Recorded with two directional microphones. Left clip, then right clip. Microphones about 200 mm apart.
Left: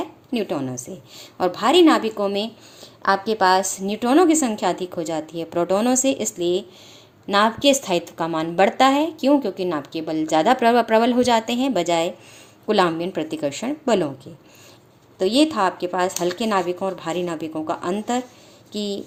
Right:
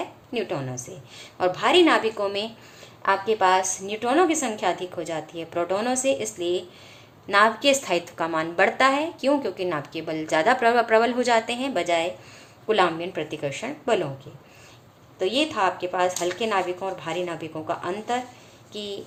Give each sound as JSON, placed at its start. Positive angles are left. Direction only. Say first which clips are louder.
{"t": 0.0, "sound": "a woman's voice", "louder": "left 3 dB", "side_deg": 50}
{"t": 15.2, "sound": "a woman's voice", "louder": "left 4 dB", "side_deg": 50}